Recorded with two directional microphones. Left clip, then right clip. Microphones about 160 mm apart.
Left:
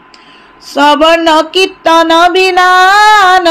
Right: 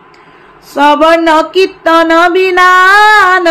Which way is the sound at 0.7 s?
60° left (ahead or behind).